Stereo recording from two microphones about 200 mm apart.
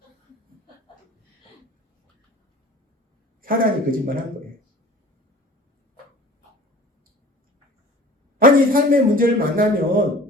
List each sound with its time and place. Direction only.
3.4 s a man's voice: 45° right (ahead or behind)
8.4 s a man's voice: 45° right (ahead or behind)